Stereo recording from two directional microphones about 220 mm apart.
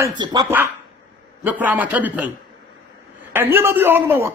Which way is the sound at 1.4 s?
10° right (ahead or behind).